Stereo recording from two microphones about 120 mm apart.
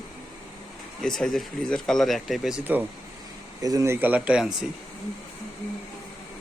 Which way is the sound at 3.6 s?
30° right (ahead or behind).